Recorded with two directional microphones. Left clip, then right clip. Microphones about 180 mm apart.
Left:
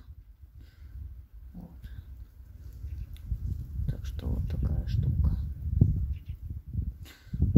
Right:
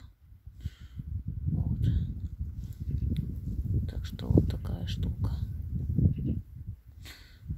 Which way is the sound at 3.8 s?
10° right (ahead or behind).